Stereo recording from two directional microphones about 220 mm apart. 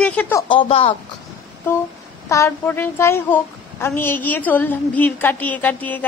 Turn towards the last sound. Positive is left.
turn(degrees=5)  # may be behind; listen again after turning